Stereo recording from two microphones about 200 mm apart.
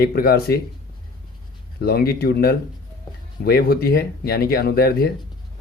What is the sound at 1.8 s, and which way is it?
Speech, 50° left (ahead or behind).